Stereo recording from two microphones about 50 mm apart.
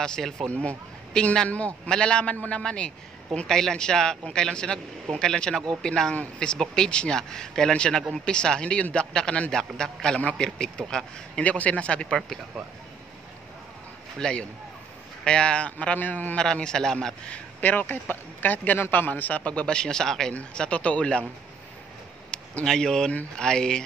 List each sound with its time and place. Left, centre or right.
0.0 s a man's voice: centre
3.4 s a man's voice: centre
11.4 s a man's voice: left
14.1 s a man's voice: centre; by 16.3 s left
16.6 s speech: centre
17.3 s a man's voice: left; by 20.3 s centre
20.5 s a man's voice: left
22.3 s a sound: centre
22.7 s speech: centre